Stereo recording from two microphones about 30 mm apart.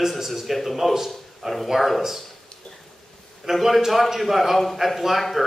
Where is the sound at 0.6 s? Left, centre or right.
Centre.